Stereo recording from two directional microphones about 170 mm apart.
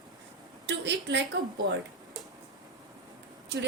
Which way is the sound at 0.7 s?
90° right.